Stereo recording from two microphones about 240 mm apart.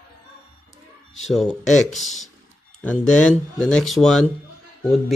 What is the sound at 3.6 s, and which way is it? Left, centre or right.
Speech, centre.